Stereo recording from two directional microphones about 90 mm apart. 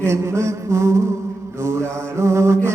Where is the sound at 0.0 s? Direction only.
30° right (ahead or behind).